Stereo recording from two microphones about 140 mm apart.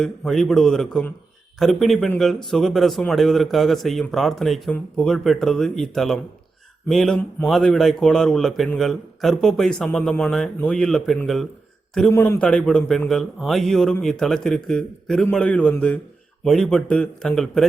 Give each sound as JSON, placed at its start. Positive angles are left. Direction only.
{"t": 0.0, "sound": "a man's voice", "side_deg": 5}
{"t": 12.1, "sound": "a man's voice", "side_deg": 20}
{"t": 12.4, "sound": "a man's voice", "side_deg": 5}